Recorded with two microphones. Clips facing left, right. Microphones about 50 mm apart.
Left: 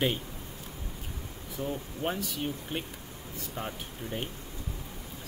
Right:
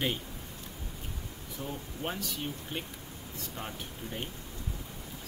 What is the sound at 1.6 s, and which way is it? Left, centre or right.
Speech, left.